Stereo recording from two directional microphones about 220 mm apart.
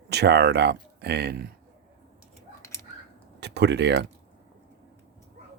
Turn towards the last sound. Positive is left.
turn(degrees=-50)  # may be behind; listen again after turning